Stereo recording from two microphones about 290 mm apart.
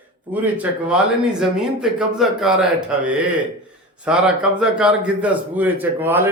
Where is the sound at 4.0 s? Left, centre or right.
Centre.